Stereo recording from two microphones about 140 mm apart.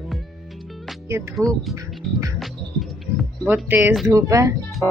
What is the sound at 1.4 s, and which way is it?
Speech, 25° right (ahead or behind).